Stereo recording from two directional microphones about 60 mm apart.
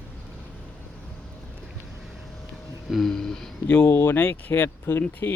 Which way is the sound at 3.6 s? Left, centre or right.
Left.